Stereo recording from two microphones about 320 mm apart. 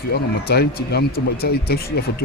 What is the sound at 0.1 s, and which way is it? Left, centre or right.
Speech, left.